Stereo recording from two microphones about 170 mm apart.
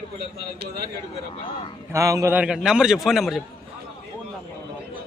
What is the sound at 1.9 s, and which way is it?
A man's voice, 20° right (ahead or behind).